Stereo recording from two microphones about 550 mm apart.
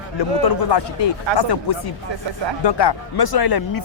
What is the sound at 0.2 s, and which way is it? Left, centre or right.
Speech, left.